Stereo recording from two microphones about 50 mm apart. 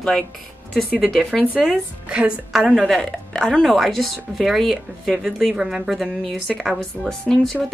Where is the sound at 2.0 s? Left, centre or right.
Right.